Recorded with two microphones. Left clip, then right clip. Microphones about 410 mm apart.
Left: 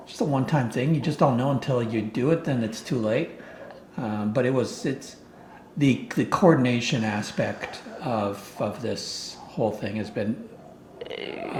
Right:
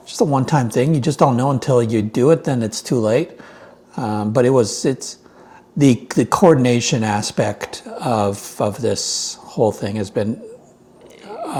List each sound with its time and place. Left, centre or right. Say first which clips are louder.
0.1 s speech: right 9 dB; right